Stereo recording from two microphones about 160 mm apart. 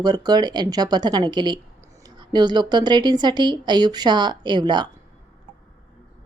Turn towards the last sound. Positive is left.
turn(degrees=-25)  # may be behind; listen again after turning